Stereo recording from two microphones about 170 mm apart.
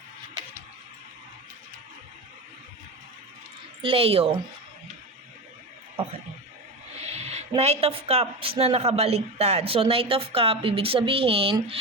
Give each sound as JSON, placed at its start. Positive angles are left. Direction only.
{"t": 3.8, "sound": "speech", "side_deg": -35}
{"t": 6.9, "sound": "speech", "side_deg": -40}